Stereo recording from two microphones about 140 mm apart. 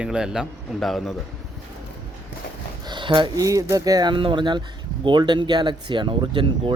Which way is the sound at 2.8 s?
35° right (ahead or behind).